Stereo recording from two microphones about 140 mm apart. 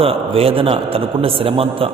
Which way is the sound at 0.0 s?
45° right (ahead or behind).